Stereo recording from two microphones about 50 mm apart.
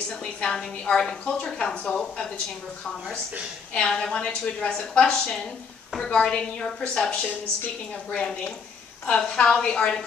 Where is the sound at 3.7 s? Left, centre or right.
Left.